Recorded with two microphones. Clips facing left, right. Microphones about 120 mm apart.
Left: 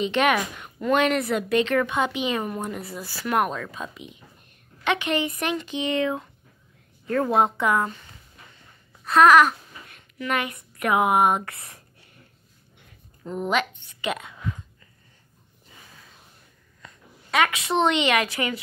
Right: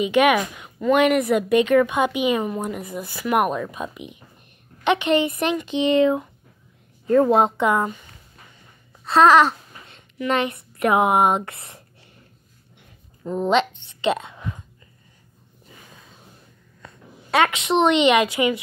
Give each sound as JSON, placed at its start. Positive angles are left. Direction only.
{"t": 0.0, "sound": "a woman's voice", "side_deg": -10}
{"t": 9.0, "sound": "a child's voice", "side_deg": -30}
{"t": 13.3, "sound": "speech", "side_deg": -25}
{"t": 16.8, "sound": "a woman's voice", "side_deg": -25}